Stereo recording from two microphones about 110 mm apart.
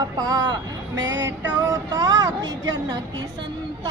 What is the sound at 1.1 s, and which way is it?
Music, 20° right (ahead or behind).